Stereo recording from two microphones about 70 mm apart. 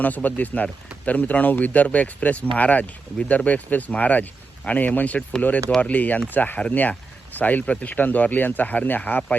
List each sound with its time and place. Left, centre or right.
0.0 s speech: left